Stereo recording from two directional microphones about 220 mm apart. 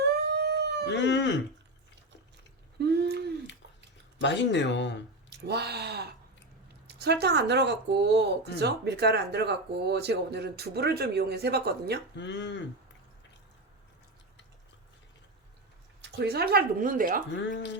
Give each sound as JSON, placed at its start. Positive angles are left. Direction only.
{"t": 0.0, "sound": "howl", "side_deg": -50}
{"t": 0.9, "sound": "speech", "side_deg": 50}
{"t": 2.7, "sound": "a sound", "side_deg": -50}
{"t": 4.2, "sound": "speech", "side_deg": 55}
{"t": 5.3, "sound": "a sound", "side_deg": -50}
{"t": 6.8, "sound": "speech", "side_deg": -50}
{"t": 12.1, "sound": "speech", "side_deg": 55}
{"t": 16.0, "sound": "speech", "side_deg": -50}
{"t": 17.3, "sound": "speech", "side_deg": 55}